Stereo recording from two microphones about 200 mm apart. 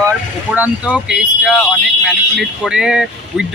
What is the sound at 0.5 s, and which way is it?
Speech, 5° right (ahead or behind).